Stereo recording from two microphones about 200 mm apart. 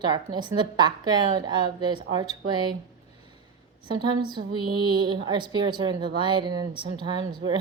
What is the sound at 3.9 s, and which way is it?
A woman's voice, 20° right (ahead or behind).